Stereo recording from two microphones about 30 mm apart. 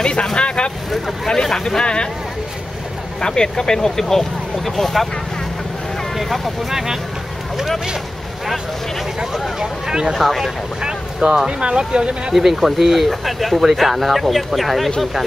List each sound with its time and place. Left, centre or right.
0.0 s speech: left
1.2 s speech: centre
3.2 s speech: left; by 5.0 s centre
6.1 s speech: centre
9.6 s speech: right
10.1 s speech: centre
11.2 s speech: right
11.6 s speech: right
12.3 s speech: centre